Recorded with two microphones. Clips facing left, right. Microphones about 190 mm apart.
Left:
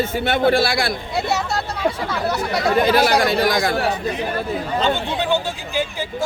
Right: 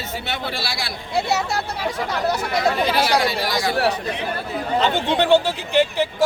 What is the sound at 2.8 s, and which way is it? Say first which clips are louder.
Speech: left 3 dB; 50° left (ahead or behind).